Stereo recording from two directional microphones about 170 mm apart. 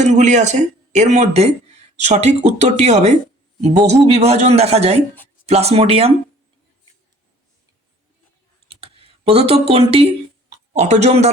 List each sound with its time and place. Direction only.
0.0 s speech: 45° right (ahead or behind)
8.6 s computer keyboard: 35° right (ahead or behind)
9.5 s speech: 35° right (ahead or behind)